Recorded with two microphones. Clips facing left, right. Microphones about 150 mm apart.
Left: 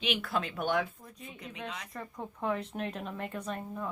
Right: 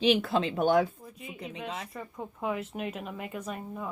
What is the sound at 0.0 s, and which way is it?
Speech, 30° right (ahead or behind).